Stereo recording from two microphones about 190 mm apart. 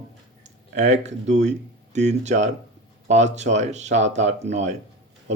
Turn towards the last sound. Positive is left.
turn(degrees=-35)  # may be behind; listen again after turning